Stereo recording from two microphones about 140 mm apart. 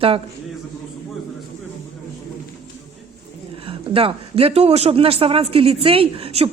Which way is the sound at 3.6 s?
40° right (ahead or behind).